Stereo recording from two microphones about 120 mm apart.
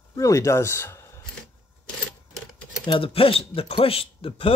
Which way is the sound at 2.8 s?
45° left (ahead or behind).